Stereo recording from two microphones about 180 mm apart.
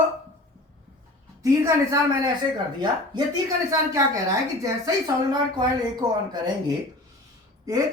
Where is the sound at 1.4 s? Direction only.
15° right (ahead or behind).